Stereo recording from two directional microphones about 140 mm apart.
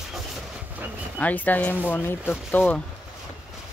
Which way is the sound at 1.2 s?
10° left (ahead or behind).